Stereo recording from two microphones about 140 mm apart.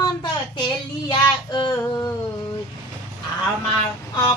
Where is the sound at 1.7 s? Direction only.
20° left (ahead or behind).